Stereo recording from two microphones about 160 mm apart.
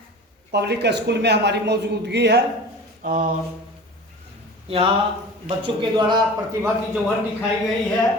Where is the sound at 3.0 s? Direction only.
60° right (ahead or behind).